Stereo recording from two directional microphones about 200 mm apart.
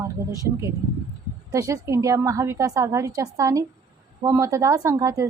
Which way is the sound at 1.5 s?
15° right (ahead or behind).